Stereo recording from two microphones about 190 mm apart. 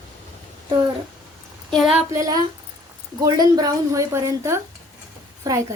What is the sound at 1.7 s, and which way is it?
Speech, centre (ahead or behind).